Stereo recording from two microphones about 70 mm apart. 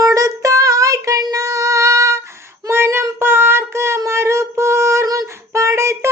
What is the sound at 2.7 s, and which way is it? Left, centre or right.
Child singing, right.